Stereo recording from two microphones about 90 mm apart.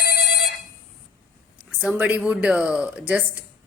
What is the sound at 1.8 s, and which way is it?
Speech, 15° right (ahead or behind).